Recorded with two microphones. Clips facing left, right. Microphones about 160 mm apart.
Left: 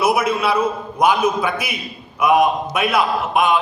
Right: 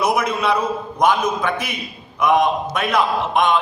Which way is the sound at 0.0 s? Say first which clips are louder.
Left 2 dB; 5° left (ahead or behind).